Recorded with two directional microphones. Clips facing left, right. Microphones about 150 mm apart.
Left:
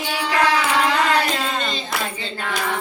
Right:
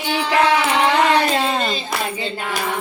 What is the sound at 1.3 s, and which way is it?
Clapping, 30° right (ahead or behind).